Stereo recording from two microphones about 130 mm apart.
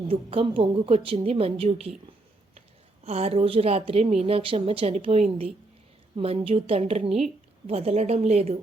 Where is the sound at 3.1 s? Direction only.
50° right (ahead or behind).